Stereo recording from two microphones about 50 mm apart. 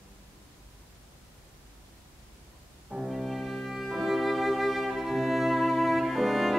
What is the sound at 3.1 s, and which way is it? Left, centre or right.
Music, centre.